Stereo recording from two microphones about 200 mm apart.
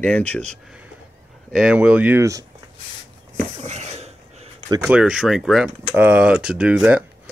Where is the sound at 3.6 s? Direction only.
35° right (ahead or behind).